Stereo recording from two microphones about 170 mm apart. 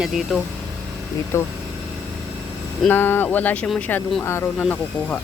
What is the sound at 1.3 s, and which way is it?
Speech, 15° left (ahead or behind).